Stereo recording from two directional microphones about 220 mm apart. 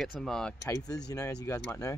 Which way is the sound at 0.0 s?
Centre (ahead or behind).